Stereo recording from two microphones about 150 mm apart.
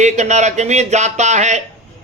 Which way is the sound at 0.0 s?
50° right (ahead or behind).